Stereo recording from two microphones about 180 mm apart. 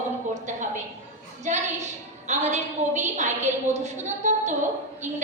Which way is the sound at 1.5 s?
40° right (ahead or behind).